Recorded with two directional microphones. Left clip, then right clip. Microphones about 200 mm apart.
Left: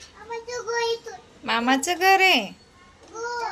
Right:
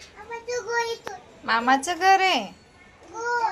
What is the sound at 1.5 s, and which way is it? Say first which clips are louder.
A woman's voice: right 1 dB; 30° left (ahead or behind).